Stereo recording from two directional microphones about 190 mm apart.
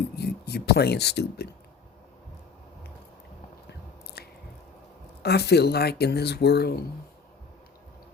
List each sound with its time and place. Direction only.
0.2 s speech: 60° left (ahead or behind)
4.2 s squish: 55° left (ahead or behind)
5.2 s speech: 60° left (ahead or behind)